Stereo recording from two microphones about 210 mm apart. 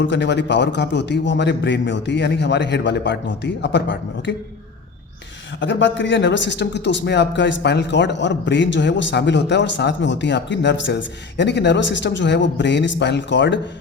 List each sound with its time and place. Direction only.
0.0 s a man's voice: 60° left (ahead or behind)
5.5 s a man's voice: 60° left (ahead or behind)